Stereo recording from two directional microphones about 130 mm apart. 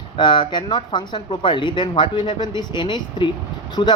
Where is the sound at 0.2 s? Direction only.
35° left (ahead or behind).